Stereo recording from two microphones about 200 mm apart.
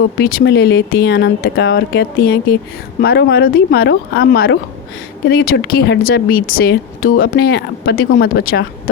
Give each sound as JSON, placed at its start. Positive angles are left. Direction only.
{"t": 0.2, "sound": "speech", "side_deg": 50}